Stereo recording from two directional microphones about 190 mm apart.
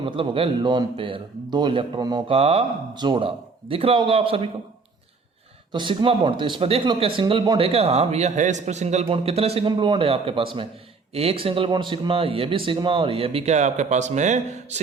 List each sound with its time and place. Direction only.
0.0 s speech: 30° right (ahead or behind)
5.7 s speech: 25° right (ahead or behind)